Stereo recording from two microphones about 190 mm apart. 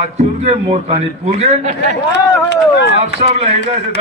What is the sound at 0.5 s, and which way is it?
A man's voice, 30° right (ahead or behind).